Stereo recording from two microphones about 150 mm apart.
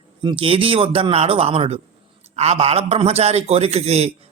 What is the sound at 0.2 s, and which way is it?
A man's voice, 35° right (ahead or behind).